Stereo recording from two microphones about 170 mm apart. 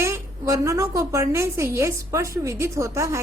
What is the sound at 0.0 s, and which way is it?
A woman's voice, 15° right (ahead or behind).